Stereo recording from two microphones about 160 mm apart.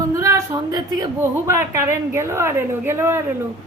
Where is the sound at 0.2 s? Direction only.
20° right (ahead or behind).